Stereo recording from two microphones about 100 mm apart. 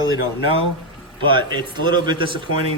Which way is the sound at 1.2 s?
50° right (ahead or behind).